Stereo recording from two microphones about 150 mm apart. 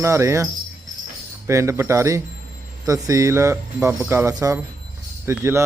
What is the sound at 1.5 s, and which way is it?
Speech, 20° right (ahead or behind).